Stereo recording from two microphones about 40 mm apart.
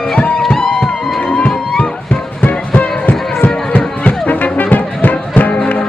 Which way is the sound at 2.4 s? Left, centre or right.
Left.